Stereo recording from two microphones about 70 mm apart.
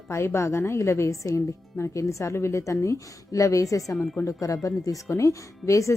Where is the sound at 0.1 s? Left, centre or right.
Left.